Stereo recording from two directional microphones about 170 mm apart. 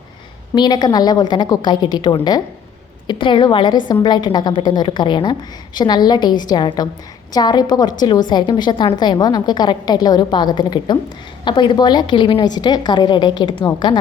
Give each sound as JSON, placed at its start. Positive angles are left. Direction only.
{"t": 0.5, "sound": "a woman's voice", "side_deg": 25}